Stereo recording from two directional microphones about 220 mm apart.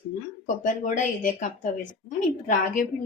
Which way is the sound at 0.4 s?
35° left (ahead or behind).